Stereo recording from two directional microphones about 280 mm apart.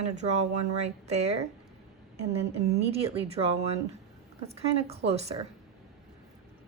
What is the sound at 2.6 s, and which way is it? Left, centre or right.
Speech, right.